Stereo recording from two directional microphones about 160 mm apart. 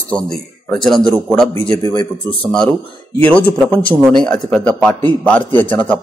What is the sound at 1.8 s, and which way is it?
Speech, 20° left (ahead or behind).